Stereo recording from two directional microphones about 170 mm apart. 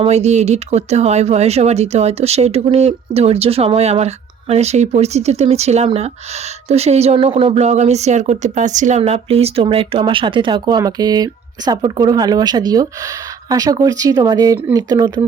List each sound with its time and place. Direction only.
0.0 s speech: 40° right (ahead or behind); by 15.2 s 25° right (ahead or behind)